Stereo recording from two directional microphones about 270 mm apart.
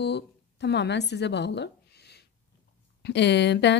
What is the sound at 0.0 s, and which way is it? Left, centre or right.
Speech, left.